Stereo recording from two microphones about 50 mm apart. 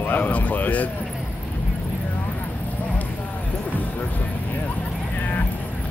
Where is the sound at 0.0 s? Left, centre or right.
Left.